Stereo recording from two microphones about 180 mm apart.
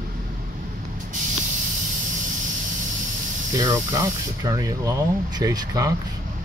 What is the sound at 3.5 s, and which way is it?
Speech, 20° right (ahead or behind).